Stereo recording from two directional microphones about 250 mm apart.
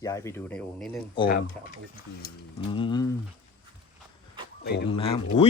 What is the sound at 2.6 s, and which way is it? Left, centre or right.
Speech, centre.